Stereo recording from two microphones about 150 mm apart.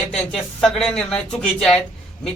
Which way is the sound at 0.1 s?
5° left (ahead or behind).